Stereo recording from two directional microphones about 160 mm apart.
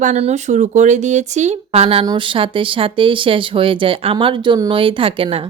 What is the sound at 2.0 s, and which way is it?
Speech, 30° right (ahead or behind).